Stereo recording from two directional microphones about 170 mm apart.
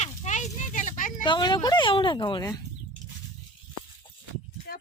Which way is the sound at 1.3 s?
25° left (ahead or behind).